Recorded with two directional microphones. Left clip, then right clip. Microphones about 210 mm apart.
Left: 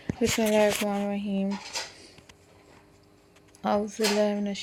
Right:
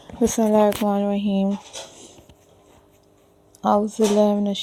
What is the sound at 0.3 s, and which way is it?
Speech, 15° right (ahead or behind).